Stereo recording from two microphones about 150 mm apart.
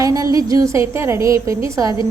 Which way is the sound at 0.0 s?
25° right (ahead or behind).